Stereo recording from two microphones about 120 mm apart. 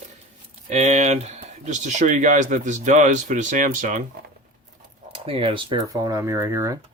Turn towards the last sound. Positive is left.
turn(degrees=-20)  # may be behind; listen again after turning